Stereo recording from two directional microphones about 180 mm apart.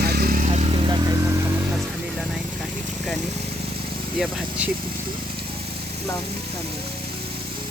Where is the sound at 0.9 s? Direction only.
20° right (ahead or behind).